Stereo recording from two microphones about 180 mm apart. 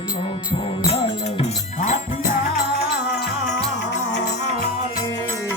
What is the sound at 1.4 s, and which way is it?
Music, 40° left (ahead or behind).